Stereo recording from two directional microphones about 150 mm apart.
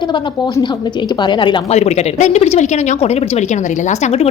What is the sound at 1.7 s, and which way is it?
Speech, 45° left (ahead or behind).